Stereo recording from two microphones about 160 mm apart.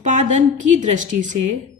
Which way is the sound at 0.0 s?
50° right (ahead or behind).